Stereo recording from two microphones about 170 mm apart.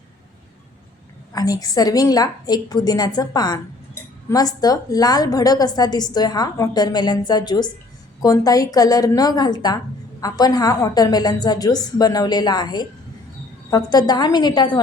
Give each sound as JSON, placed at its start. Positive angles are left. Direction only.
{"t": 1.3, "sound": "a woman's voice", "side_deg": 20}